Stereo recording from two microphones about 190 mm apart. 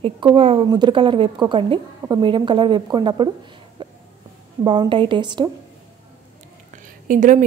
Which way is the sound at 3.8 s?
25° right (ahead or behind).